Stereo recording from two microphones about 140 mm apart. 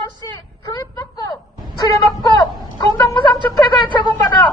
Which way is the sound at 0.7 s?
30° left (ahead or behind).